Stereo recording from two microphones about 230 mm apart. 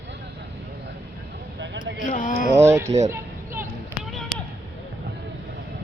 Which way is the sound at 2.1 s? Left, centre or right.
Left.